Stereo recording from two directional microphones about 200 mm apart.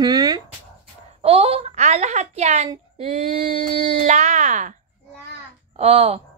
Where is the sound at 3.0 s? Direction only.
30° right (ahead or behind).